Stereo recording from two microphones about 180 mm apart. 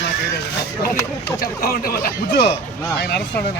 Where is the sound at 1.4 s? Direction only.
55° left (ahead or behind).